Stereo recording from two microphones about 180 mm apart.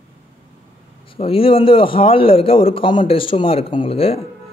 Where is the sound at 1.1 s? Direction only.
30° left (ahead or behind).